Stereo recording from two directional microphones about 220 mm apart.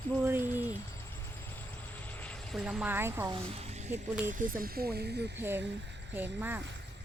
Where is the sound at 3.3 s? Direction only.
30° right (ahead or behind); by 5.1 s 45° right (ahead or behind).